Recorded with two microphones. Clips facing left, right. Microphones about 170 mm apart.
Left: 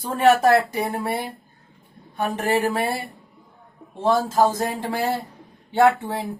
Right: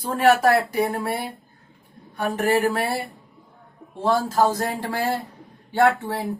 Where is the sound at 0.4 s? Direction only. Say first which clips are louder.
Left 1 dB; 25° left (ahead or behind).